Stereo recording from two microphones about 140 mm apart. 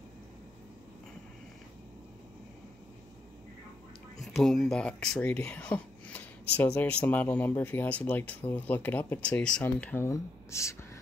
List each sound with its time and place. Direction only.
4.2 s speech: centre (ahead or behind); by 10.9 s 20° left (ahead or behind)